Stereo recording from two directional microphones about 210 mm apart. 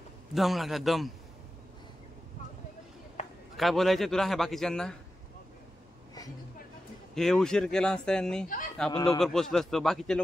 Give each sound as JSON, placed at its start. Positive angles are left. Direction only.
{"t": 0.3, "sound": "a man's voice", "side_deg": 0}
{"t": 3.2, "sound": "a sound", "side_deg": 35}
{"t": 3.5, "sound": "a man's voice", "side_deg": 0}
{"t": 7.2, "sound": "a man's voice", "side_deg": 0}
{"t": 8.5, "sound": "speech", "side_deg": 40}
{"t": 9.2, "sound": "a man's voice", "side_deg": 0}